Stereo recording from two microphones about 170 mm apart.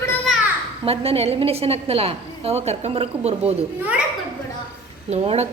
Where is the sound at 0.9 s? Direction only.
35° right (ahead or behind).